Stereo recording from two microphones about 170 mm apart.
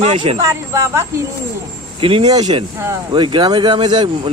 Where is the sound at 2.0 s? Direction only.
30° right (ahead or behind).